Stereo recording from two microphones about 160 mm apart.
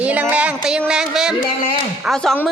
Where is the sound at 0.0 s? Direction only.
10° right (ahead or behind).